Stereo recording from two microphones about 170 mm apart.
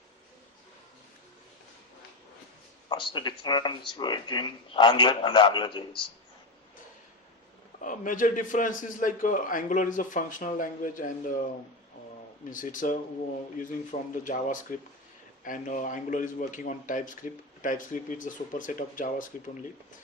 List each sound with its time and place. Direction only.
2.9 s speech: 30° left (ahead or behind)
7.8 s a man's voice: 50° left (ahead or behind)
12.5 s a man's voice: 50° left (ahead or behind)